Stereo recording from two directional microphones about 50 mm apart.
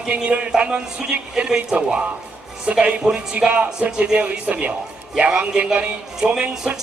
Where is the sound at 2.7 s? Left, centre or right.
Centre.